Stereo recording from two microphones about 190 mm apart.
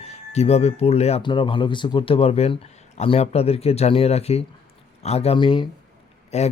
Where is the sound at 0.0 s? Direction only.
35° left (ahead or behind).